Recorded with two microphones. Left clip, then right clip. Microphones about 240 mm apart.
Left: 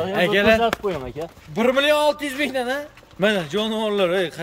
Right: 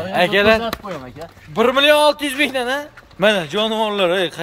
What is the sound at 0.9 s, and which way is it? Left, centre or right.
Speech, left.